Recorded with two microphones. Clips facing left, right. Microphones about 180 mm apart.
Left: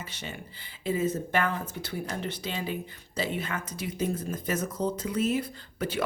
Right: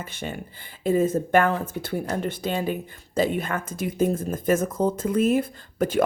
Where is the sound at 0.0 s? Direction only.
50° right (ahead or behind).